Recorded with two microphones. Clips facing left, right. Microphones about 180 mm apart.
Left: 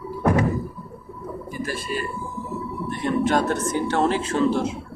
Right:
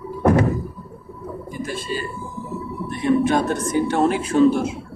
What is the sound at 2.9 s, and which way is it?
A man's voice, 15° right (ahead or behind).